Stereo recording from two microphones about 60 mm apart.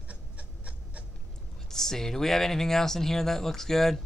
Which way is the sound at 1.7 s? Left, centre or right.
Centre.